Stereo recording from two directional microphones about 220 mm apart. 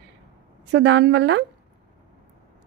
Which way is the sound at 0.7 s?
55° right (ahead or behind).